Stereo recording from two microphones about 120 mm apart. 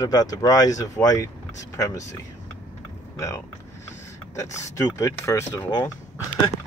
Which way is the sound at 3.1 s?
25° left (ahead or behind).